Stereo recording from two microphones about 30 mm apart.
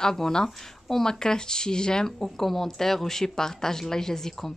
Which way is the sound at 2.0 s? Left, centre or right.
Centre.